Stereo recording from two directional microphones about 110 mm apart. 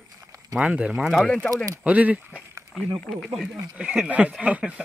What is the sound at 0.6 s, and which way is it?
Speech, 10° right (ahead or behind).